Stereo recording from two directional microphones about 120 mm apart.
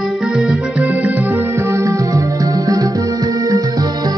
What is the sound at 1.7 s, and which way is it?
Music, 25° right (ahead or behind).